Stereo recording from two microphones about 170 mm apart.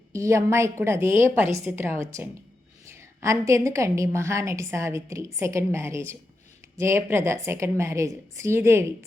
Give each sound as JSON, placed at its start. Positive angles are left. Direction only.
{"t": 0.1, "sound": "a woman's voice", "side_deg": -15}